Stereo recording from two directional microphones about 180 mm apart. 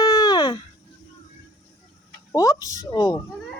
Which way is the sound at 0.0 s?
20° left (ahead or behind).